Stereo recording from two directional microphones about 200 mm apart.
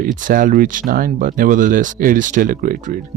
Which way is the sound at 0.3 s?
45° right (ahead or behind).